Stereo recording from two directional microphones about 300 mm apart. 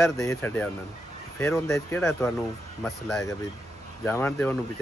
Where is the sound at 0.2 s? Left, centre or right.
Centre.